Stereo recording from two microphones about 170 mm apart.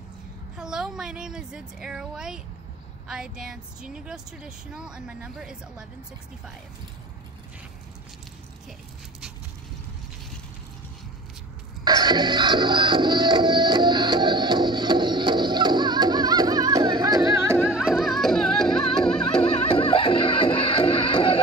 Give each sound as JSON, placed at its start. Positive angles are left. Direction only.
{"t": 0.6, "sound": "a woman's voice", "side_deg": -5}
{"t": 11.8, "sound": "music", "side_deg": -25}
{"t": 17.6, "sound": "music", "side_deg": -5}
{"t": 19.5, "sound": "music", "side_deg": 35}